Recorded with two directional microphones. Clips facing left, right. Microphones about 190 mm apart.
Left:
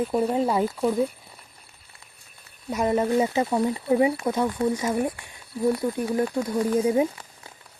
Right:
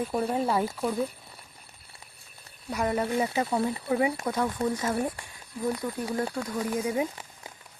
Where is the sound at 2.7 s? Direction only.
25° left (ahead or behind).